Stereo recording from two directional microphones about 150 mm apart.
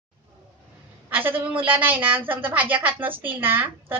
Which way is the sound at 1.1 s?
15° right (ahead or behind).